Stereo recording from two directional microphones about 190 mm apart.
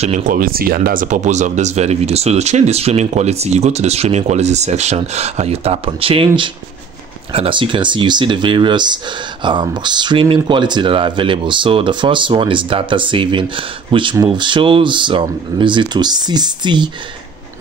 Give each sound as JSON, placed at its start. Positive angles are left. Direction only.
{"t": 0.0, "sound": "speech", "side_deg": -40}